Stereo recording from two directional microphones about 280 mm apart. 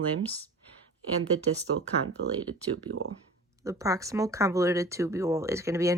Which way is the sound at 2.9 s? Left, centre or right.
Right.